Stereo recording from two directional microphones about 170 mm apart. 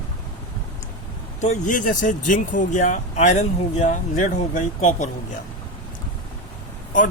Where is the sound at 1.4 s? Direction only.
45° left (ahead or behind).